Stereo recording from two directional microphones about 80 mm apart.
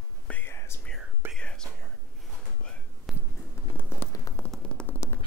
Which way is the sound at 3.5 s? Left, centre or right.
Left.